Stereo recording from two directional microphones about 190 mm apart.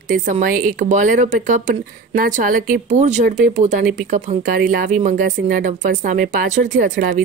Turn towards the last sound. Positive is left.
turn(degrees=-40)  # may be behind; listen again after turning